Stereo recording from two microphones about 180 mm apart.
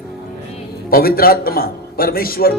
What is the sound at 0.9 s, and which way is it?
A man's voice, 55° left (ahead or behind).